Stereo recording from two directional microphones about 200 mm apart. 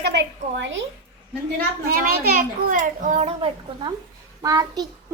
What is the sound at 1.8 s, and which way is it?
A child's voice, 50° right (ahead or behind).